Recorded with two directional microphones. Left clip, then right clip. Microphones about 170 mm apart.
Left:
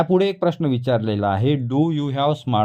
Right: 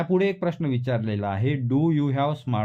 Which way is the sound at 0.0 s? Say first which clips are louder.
Left 5 dB; 30° left (ahead or behind).